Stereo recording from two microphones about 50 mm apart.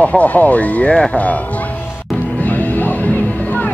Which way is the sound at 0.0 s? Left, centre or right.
Left.